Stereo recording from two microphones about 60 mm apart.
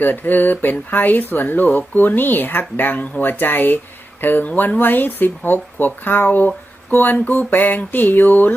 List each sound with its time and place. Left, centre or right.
0.0 s speech: left